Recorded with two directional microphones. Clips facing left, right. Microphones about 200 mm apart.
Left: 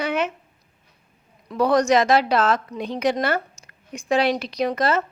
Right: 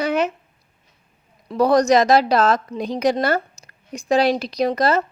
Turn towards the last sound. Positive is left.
turn(degrees=-35)  # may be behind; listen again after turning